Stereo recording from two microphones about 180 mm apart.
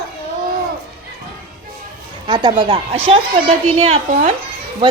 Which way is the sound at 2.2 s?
25° right (ahead or behind).